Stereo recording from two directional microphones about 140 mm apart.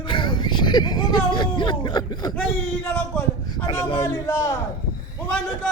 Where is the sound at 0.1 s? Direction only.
35° left (ahead or behind).